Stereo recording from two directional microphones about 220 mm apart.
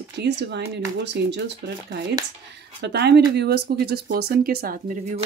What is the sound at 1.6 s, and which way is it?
Speech, 45° right (ahead or behind).